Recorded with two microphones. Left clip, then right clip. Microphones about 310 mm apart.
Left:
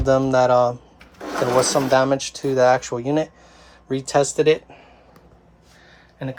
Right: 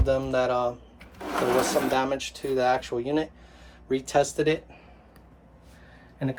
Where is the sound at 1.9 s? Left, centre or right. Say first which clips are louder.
Left 8 dB; left.